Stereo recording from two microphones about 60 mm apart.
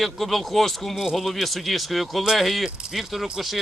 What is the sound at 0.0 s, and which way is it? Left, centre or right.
A man's voice, centre.